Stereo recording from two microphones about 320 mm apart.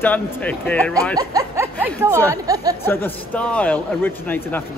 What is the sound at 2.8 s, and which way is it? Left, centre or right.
Speech, centre.